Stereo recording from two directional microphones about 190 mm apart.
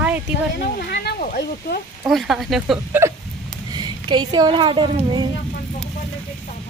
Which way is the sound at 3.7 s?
25° right (ahead or behind).